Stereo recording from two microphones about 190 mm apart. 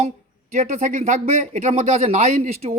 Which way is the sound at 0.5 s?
40° right (ahead or behind).